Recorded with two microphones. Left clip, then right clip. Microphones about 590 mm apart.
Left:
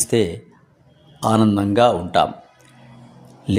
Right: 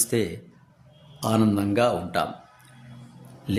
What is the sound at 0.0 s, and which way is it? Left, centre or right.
A man's voice, right.